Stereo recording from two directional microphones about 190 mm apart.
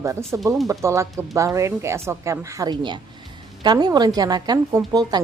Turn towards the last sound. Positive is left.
turn(degrees=-20)  # may be behind; listen again after turning